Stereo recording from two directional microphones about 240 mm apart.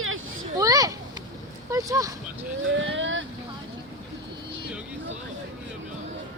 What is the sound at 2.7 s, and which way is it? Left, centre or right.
Speech, right.